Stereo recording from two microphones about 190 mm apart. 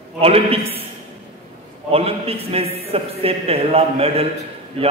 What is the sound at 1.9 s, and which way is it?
A man's voice, 30° right (ahead or behind).